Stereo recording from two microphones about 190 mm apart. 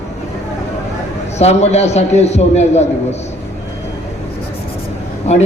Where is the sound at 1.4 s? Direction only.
35° left (ahead or behind).